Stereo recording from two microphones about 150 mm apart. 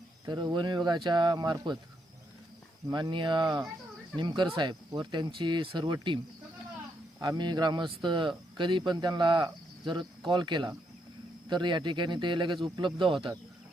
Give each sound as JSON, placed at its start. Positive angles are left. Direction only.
{"t": 0.3, "sound": "speech", "side_deg": -30}
{"t": 2.9, "sound": "speech", "side_deg": -30}
{"t": 7.2, "sound": "speech", "side_deg": -30}